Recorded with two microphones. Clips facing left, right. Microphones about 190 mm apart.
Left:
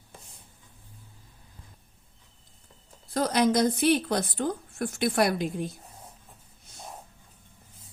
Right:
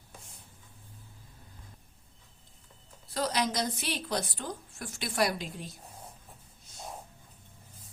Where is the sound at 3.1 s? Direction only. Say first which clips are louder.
Left 7 dB; 50° left (ahead or behind).